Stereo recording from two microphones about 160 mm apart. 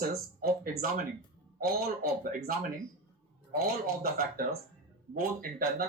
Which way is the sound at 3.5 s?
70° right (ahead or behind).